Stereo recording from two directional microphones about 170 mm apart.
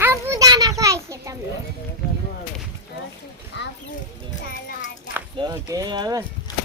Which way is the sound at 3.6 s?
90° left.